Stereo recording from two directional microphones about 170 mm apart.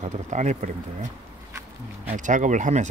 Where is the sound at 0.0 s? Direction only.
45° right (ahead or behind).